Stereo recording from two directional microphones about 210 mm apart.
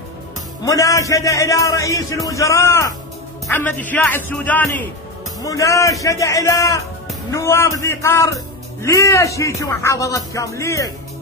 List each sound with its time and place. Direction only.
0.7 s speech: 15° left (ahead or behind)